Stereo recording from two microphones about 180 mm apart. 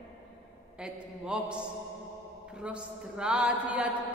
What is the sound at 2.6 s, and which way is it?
A woman's voice, 5° right (ahead or behind).